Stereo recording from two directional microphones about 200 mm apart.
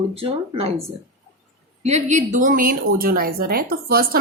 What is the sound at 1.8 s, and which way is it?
A woman's voice, 35° right (ahead or behind).